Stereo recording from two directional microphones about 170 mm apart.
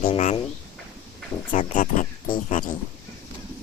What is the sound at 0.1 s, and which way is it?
Speech, 40° left (ahead or behind).